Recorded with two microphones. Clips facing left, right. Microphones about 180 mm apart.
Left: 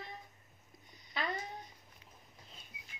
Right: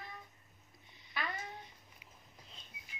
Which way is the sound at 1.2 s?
25° left (ahead or behind).